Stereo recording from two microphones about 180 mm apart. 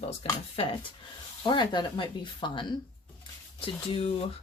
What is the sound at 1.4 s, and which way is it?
Speech, 25° left (ahead or behind).